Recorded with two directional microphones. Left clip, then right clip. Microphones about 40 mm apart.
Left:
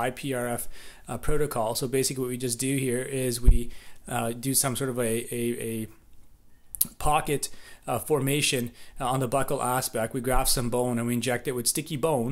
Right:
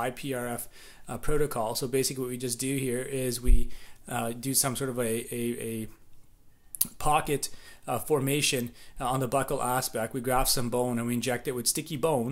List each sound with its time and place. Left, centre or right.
0.0 s speech: left